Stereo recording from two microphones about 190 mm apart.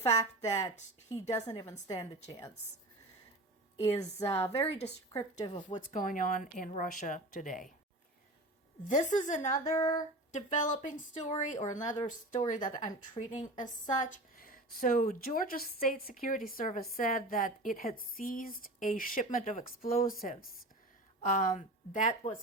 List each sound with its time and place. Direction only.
0.1 s a woman's voice: 20° left (ahead or behind)
3.8 s speech: 35° left (ahead or behind)
4.2 s a woman's voice: 15° left (ahead or behind)
5.9 s speech: 45° left (ahead or behind)
9.2 s speech: 40° left (ahead or behind)
9.6 s a woman's voice: 15° left (ahead or behind)
10.3 s speech: 40° left (ahead or behind)